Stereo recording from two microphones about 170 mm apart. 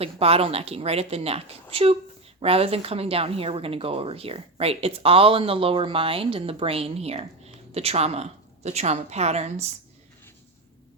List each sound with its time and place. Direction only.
0.0 s speech: 35° right (ahead or behind)